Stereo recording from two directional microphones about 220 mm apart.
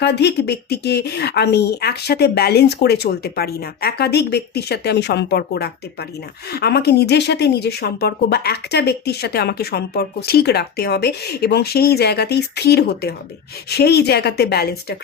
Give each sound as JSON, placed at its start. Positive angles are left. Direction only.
{"t": 0.0, "sound": "speech", "side_deg": 50}